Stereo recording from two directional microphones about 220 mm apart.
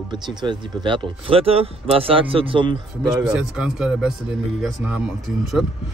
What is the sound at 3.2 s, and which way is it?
Speech, 5° right (ahead or behind).